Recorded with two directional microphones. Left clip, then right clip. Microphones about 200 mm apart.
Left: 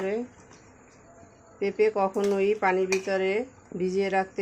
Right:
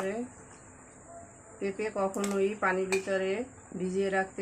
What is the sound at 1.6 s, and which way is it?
Speech, 25° left (ahead or behind).